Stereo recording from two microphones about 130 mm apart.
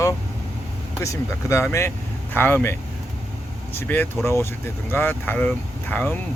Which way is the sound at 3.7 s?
15° left (ahead or behind).